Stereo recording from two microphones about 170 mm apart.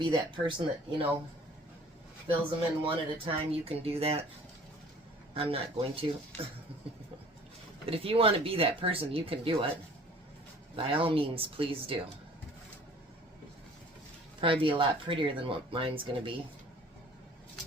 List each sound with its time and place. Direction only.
0.0 s speech: 30° right (ahead or behind)
2.8 s speech: 30° right (ahead or behind)
5.3 s speech: 35° right (ahead or behind)
7.9 s speech: 35° right (ahead or behind)
10.8 s speech: 30° right (ahead or behind)
14.4 s speech: 30° right (ahead or behind)